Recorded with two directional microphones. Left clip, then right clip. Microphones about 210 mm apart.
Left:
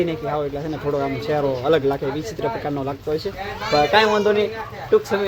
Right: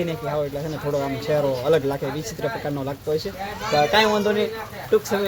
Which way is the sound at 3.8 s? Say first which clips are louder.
Left 2 dB; centre (ahead or behind).